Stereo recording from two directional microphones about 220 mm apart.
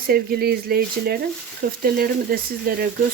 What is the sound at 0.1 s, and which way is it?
Speech, 45° right (ahead or behind).